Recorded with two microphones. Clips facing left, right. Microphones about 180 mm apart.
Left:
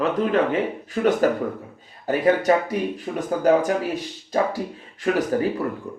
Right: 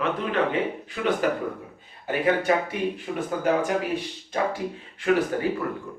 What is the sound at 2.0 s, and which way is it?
Speech, 40° left (ahead or behind).